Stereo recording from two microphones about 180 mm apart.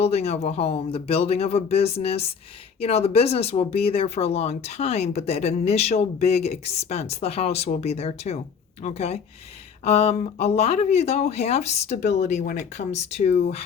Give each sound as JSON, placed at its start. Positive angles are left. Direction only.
{"t": 0.0, "sound": "speech", "side_deg": 35}